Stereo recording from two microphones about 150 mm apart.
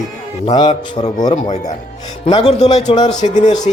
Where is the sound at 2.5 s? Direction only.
45° left (ahead or behind).